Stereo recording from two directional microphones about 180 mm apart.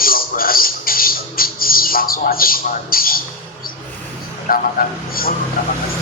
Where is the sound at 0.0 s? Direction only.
55° left (ahead or behind).